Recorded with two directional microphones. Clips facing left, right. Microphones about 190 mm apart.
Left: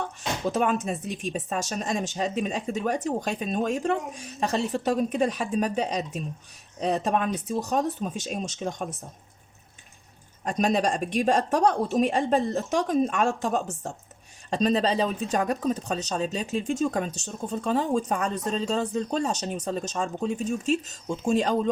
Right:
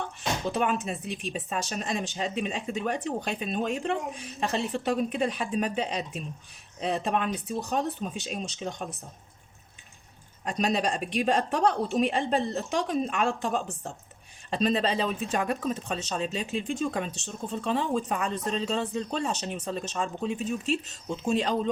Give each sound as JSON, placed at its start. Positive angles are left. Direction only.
{"t": 0.5, "sound": "speech", "side_deg": 45}
{"t": 10.4, "sound": "speech", "side_deg": 45}